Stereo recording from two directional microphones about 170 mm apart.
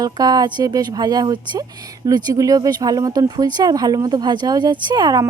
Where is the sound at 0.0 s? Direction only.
20° right (ahead or behind).